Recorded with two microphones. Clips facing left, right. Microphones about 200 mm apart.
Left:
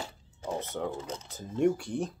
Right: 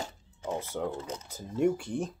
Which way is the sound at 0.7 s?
5° right (ahead or behind).